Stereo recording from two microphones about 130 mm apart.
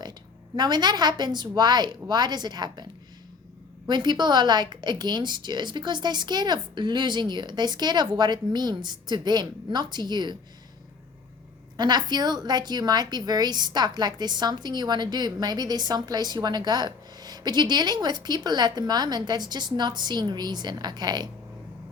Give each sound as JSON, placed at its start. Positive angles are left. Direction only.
{"t": 0.0, "sound": "a woman's voice", "side_deg": -35}
{"t": 11.8, "sound": "a woman's voice", "side_deg": -30}